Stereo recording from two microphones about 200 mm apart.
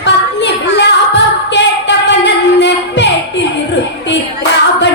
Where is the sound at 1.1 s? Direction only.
60° left (ahead or behind).